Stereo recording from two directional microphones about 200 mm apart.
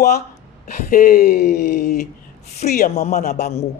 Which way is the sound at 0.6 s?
40° left (ahead or behind).